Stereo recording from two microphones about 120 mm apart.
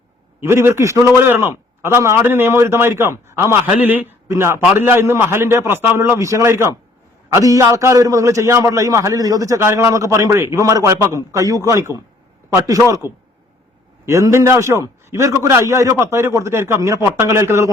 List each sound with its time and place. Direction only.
0.4 s a man's voice: 20° right (ahead or behind)